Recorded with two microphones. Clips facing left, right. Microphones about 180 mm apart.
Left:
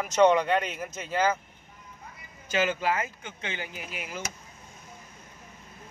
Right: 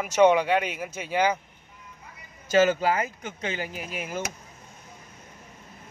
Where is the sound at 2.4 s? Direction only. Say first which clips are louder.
Right 6 dB; 40° right (ahead or behind).